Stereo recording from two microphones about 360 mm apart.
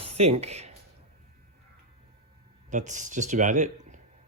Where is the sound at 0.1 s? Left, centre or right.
Centre.